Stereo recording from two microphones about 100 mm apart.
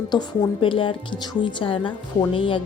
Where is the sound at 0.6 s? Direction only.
60° left (ahead or behind).